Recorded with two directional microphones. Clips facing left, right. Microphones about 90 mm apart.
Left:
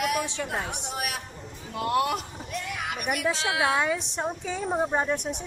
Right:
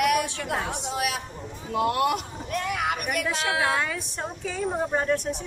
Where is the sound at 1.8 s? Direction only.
Centre (ahead or behind).